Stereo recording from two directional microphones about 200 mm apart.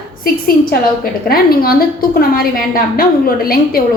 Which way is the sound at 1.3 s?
50° left (ahead or behind).